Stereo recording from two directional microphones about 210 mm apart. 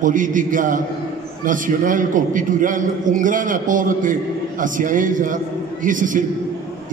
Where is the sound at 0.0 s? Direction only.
40° right (ahead or behind).